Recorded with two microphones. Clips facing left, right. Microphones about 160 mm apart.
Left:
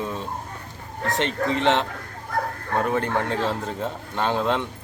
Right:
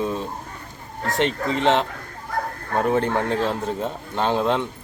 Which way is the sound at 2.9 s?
20° right (ahead or behind).